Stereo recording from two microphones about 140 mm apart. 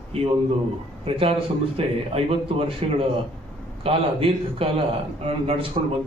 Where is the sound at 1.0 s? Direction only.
40° right (ahead or behind).